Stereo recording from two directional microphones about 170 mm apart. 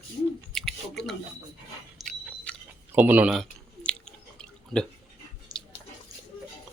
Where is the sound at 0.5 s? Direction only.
Centre (ahead or behind).